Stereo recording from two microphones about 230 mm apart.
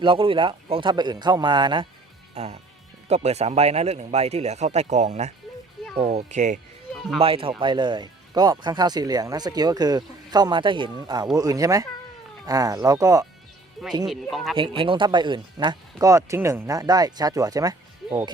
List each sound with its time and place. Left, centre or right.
0.0 s speech: right
14.0 s speech: centre
14.5 s speech: right